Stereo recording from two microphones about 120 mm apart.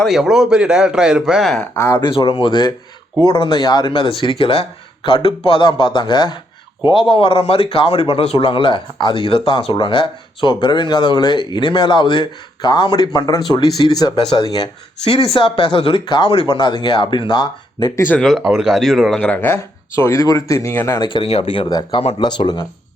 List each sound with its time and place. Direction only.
0.0 s speech: 5° right (ahead or behind)
1.7 s speech: 20° left (ahead or behind)
2.0 s speech: 45° left (ahead or behind)
15.0 s speech: 50° left (ahead or behind)
18.1 s speech: 5° left (ahead or behind); by 21.0 s 20° left (ahead or behind)
21.0 s speech: 45° left (ahead or behind)
21.7 s speech: 35° left (ahead or behind)